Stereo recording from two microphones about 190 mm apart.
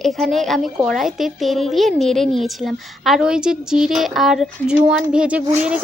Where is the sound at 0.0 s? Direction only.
Centre (ahead or behind).